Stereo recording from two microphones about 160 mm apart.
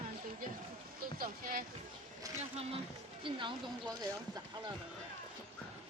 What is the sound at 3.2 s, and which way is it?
Speech, 30° right (ahead or behind).